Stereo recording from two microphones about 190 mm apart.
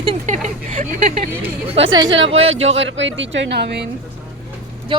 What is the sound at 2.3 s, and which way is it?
Speech, 90° right.